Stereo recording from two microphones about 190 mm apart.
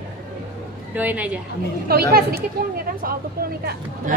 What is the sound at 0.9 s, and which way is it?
Speech, 10° right (ahead or behind).